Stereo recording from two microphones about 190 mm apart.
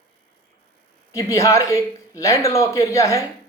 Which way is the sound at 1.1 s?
15° left (ahead or behind).